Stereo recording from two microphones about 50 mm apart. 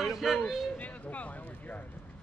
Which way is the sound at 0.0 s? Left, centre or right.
Centre.